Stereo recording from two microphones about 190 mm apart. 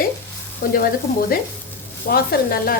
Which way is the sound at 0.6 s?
60° left (ahead or behind).